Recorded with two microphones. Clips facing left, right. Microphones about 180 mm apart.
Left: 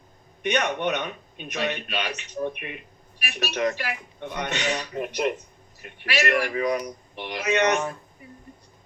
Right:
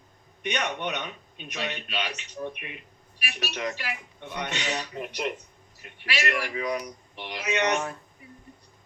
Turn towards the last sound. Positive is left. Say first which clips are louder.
# left 4 dB
turn(degrees=50)  # may be behind; listen again after turning